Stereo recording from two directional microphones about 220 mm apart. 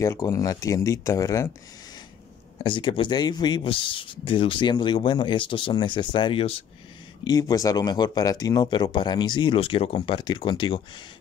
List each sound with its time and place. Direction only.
0.0 s speech: 15° left (ahead or behind)
2.6 s speech: 20° left (ahead or behind)